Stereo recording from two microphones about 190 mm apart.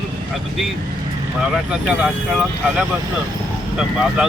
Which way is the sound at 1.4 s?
5° right (ahead or behind).